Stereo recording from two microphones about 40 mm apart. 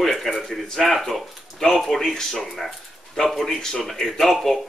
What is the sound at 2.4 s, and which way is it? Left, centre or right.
Speech, centre.